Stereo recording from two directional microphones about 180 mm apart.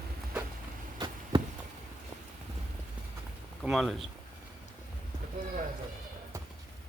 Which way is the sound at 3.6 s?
Centre (ahead or behind).